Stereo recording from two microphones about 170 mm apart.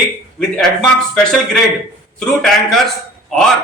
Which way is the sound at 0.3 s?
5° left (ahead or behind).